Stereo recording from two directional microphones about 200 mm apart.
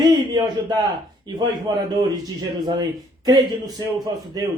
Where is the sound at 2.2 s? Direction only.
20° right (ahead or behind).